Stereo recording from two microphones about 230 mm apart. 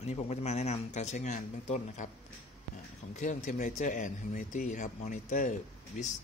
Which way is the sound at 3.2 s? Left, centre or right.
Left.